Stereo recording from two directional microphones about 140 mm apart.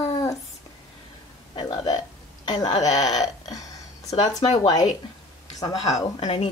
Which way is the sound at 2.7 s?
50° left (ahead or behind).